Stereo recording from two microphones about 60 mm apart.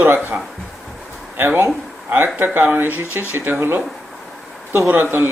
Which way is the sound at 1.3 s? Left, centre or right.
Right.